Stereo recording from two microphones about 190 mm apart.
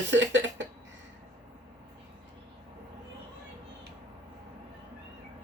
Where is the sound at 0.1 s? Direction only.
70° right (ahead or behind).